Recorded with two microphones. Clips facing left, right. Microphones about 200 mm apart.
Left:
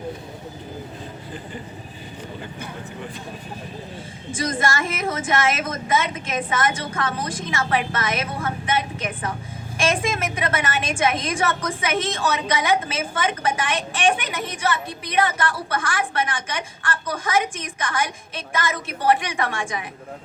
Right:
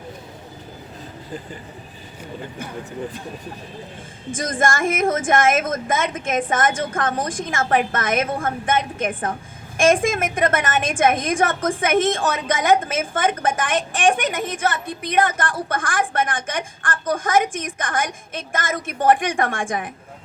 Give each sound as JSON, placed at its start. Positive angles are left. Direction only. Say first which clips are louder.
{"t": 4.4, "sound": "a woman's voice", "louder": "right 2 dB", "side_deg": -50}